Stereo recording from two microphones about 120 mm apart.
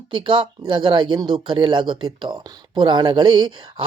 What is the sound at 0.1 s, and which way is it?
Speech, 40° right (ahead or behind).